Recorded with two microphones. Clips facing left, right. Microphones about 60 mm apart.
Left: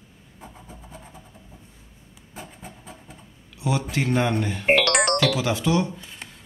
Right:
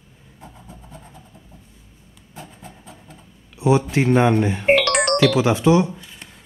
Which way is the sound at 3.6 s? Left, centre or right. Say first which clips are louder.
Right 8 dB; right.